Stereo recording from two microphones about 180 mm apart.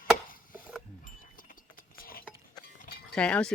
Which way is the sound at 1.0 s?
50° left (ahead or behind).